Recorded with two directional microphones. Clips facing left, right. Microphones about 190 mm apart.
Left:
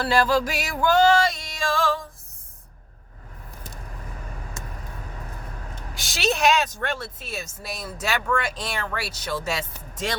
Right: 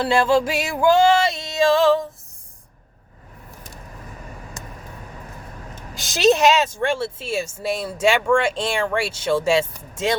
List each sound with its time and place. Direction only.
0.0 s music: 25° right (ahead or behind)
5.9 s speech: 20° right (ahead or behind)